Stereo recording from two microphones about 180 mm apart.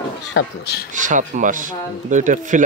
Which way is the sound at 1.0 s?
45° right (ahead or behind).